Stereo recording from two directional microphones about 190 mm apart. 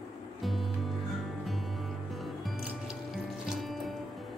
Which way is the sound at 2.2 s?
Centre (ahead or behind).